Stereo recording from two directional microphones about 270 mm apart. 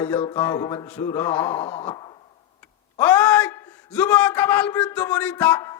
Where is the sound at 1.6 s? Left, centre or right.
Left.